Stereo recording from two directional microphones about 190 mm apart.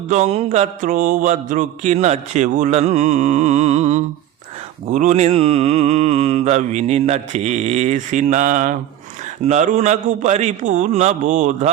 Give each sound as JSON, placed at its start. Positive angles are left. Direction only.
{"t": 0.1, "sound": "mantra", "side_deg": -35}